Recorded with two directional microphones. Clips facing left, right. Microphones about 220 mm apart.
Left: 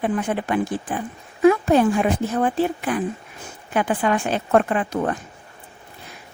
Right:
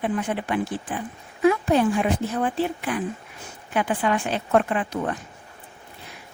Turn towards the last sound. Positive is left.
turn(degrees=50)  # may be behind; listen again after turning